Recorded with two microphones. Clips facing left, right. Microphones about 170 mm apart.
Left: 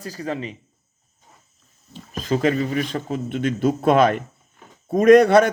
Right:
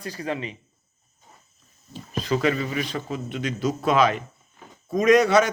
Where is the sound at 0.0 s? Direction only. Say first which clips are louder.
Left 2 dB; 35° left (ahead or behind).